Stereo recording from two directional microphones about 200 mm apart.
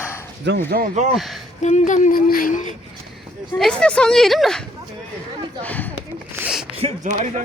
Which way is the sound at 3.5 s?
5° left (ahead or behind).